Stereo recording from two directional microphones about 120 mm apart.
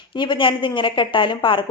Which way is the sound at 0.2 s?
45° left (ahead or behind).